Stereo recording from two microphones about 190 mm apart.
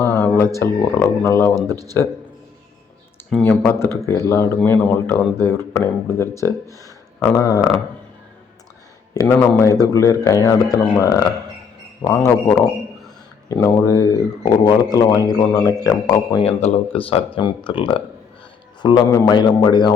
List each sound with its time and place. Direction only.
0.0 s a sound: 15° left (ahead or behind)
0.5 s speech: 10° left (ahead or behind)
3.2 s speech: 5° left (ahead or behind)
9.1 s speech: 15° left (ahead or behind)
16.4 s speech: 35° left (ahead or behind)